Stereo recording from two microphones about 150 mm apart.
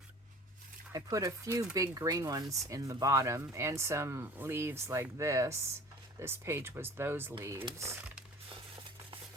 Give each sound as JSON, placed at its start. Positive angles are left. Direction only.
{"t": 0.9, "sound": "speech", "side_deg": -20}